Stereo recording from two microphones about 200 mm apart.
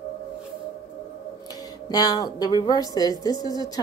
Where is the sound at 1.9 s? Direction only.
20° left (ahead or behind).